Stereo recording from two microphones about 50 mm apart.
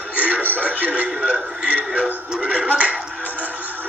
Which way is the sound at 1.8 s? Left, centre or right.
Centre.